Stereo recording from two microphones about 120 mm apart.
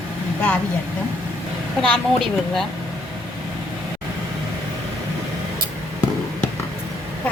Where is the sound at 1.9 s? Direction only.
Centre (ahead or behind).